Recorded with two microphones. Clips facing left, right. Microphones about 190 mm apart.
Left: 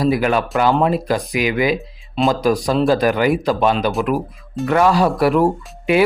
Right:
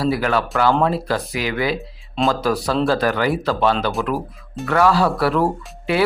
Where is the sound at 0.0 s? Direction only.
15° left (ahead or behind).